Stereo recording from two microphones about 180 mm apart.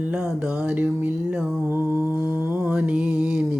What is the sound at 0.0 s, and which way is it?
Mantra, 10° right (ahead or behind).